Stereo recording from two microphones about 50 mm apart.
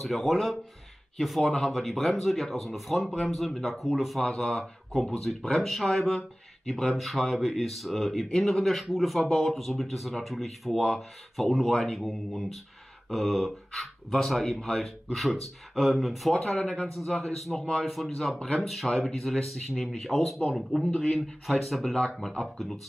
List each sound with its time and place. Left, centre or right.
0.0 s speech: centre
4.2 s speech: centre
16.5 s speech: left
16.8 s speech: centre
20.8 s speech: centre
21.2 s speech: centre